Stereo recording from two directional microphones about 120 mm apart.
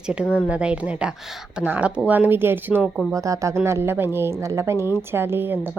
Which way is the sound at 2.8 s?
5° right (ahead or behind).